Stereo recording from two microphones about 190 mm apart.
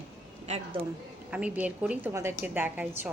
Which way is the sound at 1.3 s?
5° right (ahead or behind).